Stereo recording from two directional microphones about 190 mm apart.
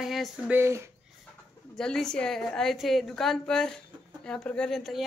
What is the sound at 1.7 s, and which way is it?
A woman's voice, centre (ahead or behind).